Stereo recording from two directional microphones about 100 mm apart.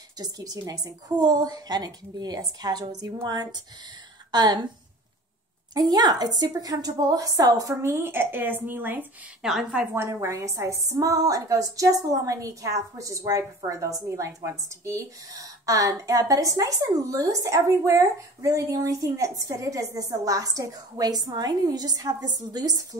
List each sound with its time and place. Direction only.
0.2 s a woman's voice: 40° right (ahead or behind)
4.3 s a woman's voice: 45° right (ahead or behind)
5.8 s a woman's voice: 45° right (ahead or behind); by 9.0 s 20° right (ahead or behind)
9.4 s a woman's voice: 5° right (ahead or behind)
9.9 s a woman's voice: 25° right (ahead or behind)